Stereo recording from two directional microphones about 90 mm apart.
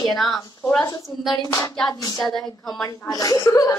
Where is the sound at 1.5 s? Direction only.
30° left (ahead or behind).